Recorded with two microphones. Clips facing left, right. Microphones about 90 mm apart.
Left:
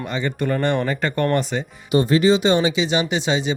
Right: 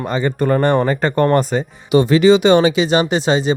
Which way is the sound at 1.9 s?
90° right.